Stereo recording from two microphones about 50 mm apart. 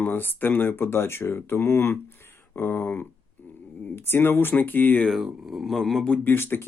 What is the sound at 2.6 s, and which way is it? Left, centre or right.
Speech, left.